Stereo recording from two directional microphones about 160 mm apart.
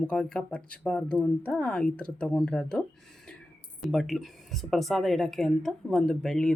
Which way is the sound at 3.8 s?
Centre (ahead or behind).